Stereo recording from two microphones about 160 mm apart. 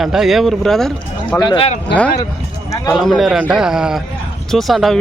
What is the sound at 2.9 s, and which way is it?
Speech, centre (ahead or behind).